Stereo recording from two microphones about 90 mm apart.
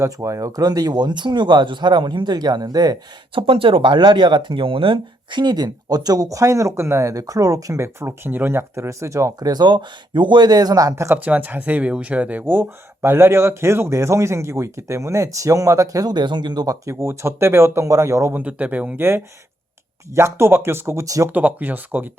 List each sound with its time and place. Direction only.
0.0 s speech: 35° right (ahead or behind)
3.3 s speech: 85° right; by 9.5 s 35° right (ahead or behind)
9.5 s speech: 55° right (ahead or behind); by 11.1 s 40° right (ahead or behind)
11.1 s speech: 15° right (ahead or behind)
18.3 s speech: 15° right (ahead or behind); by 21.2 s 35° right (ahead or behind)
21.2 s speech: 20° right (ahead or behind)